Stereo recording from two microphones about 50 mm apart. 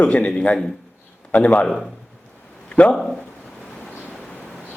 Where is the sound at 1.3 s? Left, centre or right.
Left.